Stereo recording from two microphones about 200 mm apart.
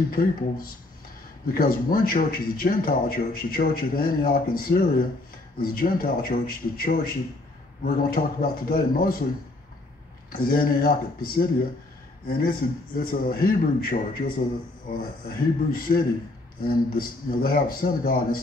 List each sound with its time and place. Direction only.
0.1 s a man's voice: 45° left (ahead or behind)
10.3 s a man's voice: 45° left (ahead or behind)